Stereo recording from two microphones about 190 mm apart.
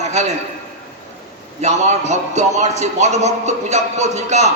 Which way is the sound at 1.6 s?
40° right (ahead or behind).